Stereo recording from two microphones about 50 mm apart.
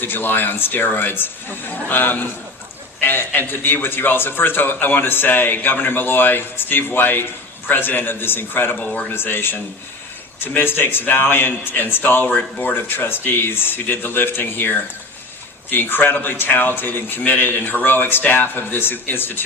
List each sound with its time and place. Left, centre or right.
0.0 s a man's voice: left